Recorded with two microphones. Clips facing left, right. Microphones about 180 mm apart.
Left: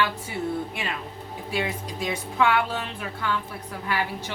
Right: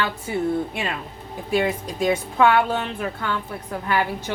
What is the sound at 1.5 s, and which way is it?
Speech, 50° right (ahead or behind).